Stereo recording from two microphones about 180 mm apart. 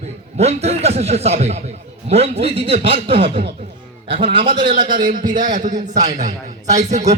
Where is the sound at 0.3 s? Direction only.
35° right (ahead or behind).